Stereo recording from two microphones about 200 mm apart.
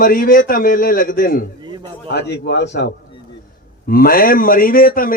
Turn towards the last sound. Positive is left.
turn(degrees=45)  # may be behind; listen again after turning